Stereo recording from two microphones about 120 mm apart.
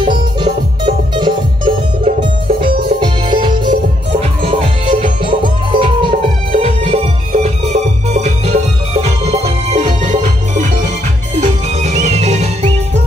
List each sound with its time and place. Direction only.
0.4 s music: 40° right (ahead or behind)
4.1 s music: 55° right (ahead or behind); by 12.4 s 75° right (ahead or behind)